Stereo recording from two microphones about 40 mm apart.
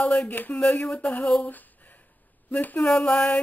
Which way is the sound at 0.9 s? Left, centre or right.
Left.